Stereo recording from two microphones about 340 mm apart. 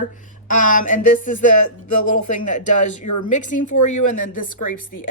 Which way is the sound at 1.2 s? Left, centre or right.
Left.